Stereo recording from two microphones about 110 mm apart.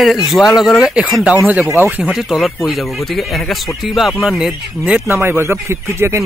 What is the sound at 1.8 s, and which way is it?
Speech, 15° right (ahead or behind).